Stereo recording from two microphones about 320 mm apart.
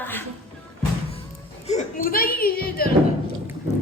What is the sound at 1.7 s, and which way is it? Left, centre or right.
Speech, left.